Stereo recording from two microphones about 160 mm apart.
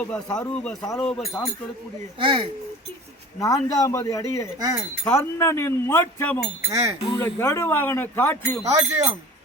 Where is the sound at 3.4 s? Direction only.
20° left (ahead or behind).